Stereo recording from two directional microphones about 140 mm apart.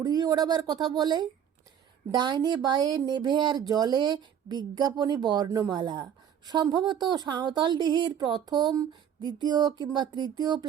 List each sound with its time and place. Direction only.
0.0 s speech: 30° right (ahead or behind)